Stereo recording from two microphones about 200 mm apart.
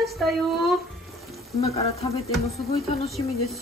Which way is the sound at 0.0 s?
Centre (ahead or behind).